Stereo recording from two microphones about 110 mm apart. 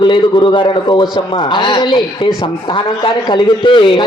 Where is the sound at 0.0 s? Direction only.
45° left (ahead or behind).